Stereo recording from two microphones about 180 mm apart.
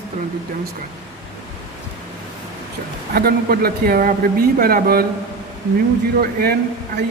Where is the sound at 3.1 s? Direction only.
55° right (ahead or behind).